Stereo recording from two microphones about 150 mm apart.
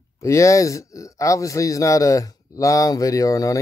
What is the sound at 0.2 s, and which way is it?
Speech, 20° left (ahead or behind).